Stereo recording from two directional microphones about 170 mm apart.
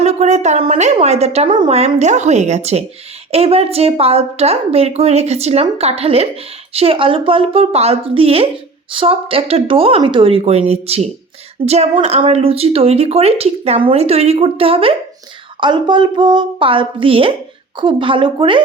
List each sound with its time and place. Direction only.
0.0 s a woman's voice: 40° right (ahead or behind)